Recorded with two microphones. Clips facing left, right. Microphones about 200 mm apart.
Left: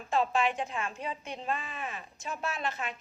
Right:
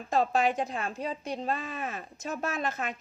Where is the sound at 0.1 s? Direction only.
40° right (ahead or behind).